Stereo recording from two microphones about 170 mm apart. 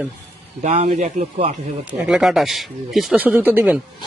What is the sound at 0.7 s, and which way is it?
Speech, 40° right (ahead or behind).